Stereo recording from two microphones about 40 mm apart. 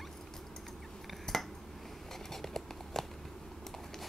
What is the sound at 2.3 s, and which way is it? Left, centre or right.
Patter, centre.